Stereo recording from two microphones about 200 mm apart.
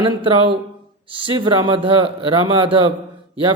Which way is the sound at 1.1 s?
25° right (ahead or behind).